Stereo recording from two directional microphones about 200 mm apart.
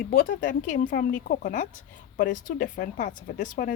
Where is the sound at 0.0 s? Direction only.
45° left (ahead or behind).